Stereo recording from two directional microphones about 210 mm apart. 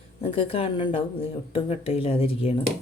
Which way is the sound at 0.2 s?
25° left (ahead or behind).